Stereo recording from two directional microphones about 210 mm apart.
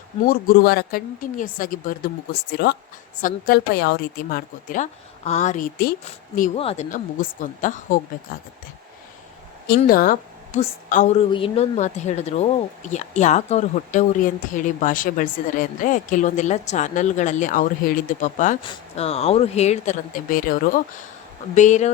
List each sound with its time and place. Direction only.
0.3 s speech: 45° left (ahead or behind)
2.5 s speech: 50° left (ahead or behind)
3.2 s a woman's voice: 40° left (ahead or behind)
6.6 s a woman's voice: 30° left (ahead or behind)
9.6 s a woman's voice: 45° left (ahead or behind)
18.6 s a woman's voice: 25° left (ahead or behind)